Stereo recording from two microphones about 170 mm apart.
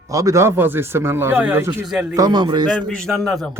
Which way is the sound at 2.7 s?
5° left (ahead or behind).